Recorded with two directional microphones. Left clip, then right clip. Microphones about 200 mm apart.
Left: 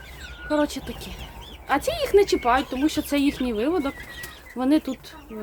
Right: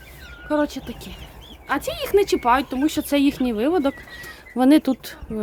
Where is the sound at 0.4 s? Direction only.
20° right (ahead or behind).